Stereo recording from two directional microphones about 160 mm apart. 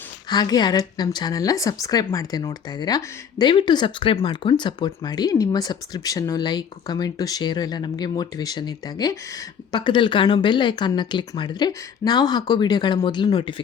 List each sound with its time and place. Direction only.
0.3 s speech: 25° left (ahead or behind)